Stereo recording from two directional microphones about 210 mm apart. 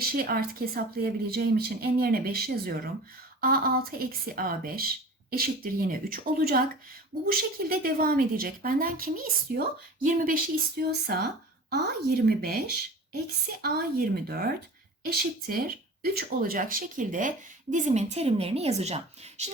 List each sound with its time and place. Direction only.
0.2 s a woman's voice: 45° right (ahead or behind)